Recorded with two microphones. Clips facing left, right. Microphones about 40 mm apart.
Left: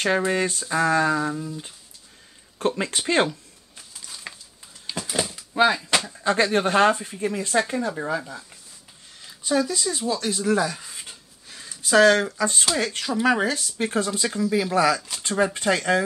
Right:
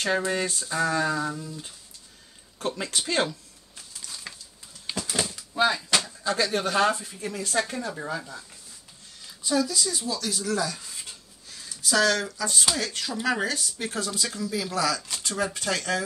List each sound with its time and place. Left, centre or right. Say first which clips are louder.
0.0 s speech: left 4 dB; centre
2.6 s speech: left 5 dB; left
3.3 s a sound: left 4 dB; centre
5.7 s speech: left 3 dB; centre
6.2 s speech: left 5 dB; left